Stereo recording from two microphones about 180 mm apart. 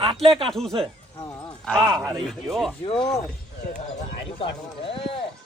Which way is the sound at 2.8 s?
30° left (ahead or behind).